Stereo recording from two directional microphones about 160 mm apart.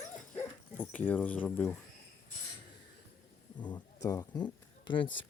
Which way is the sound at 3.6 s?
20° left (ahead or behind).